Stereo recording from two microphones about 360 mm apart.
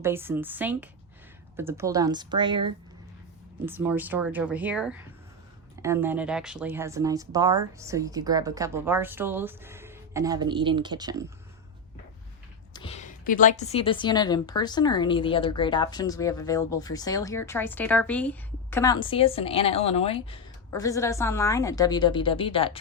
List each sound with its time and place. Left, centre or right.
0.0 s speech: centre
12.7 s a woman's voice: centre